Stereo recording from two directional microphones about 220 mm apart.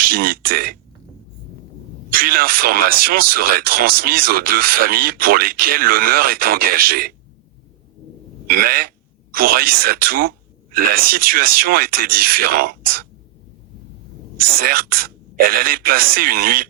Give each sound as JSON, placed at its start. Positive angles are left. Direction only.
{"t": 0.0, "sound": "speech", "side_deg": -40}
{"t": 2.1, "sound": "speech", "side_deg": -40}
{"t": 8.4, "sound": "speech", "side_deg": -45}
{"t": 14.3, "sound": "speech", "side_deg": -40}